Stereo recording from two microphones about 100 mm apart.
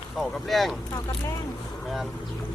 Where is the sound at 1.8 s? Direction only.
Centre (ahead or behind).